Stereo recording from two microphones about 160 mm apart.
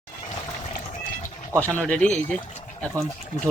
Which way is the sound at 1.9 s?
10° left (ahead or behind).